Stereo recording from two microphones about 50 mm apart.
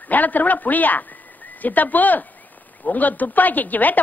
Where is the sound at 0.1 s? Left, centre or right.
Left.